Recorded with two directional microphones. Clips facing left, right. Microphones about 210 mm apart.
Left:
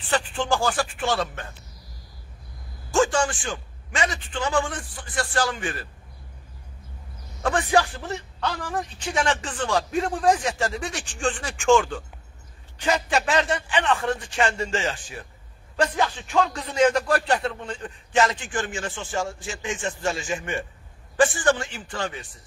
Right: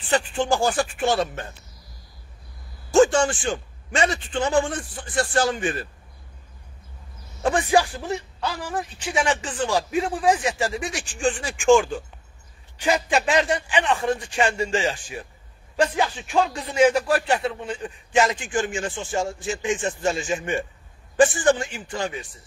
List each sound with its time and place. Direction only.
0.1 s speech: 15° right (ahead or behind)
2.9 s a sound: 25° right (ahead or behind)
4.0 s speech: 30° right (ahead or behind)
7.4 s a man's voice: 15° right (ahead or behind)